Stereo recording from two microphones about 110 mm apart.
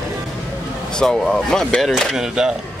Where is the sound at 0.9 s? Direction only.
5° left (ahead or behind).